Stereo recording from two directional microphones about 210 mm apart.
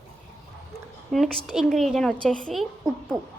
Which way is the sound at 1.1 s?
Centre (ahead or behind).